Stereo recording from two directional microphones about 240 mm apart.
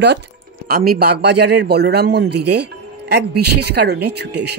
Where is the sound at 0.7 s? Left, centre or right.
Right.